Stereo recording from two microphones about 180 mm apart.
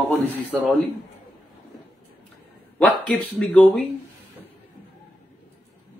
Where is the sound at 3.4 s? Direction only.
5° left (ahead or behind).